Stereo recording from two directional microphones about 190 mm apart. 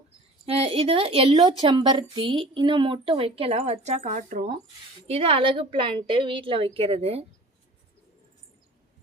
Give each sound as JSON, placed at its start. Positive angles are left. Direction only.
{"t": 0.4, "sound": "a woman's voice", "side_deg": -30}